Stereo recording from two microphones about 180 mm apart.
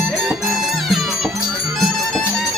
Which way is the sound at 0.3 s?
Centre (ahead or behind).